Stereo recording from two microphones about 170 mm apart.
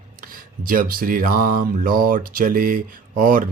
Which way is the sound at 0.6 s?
55° right (ahead or behind).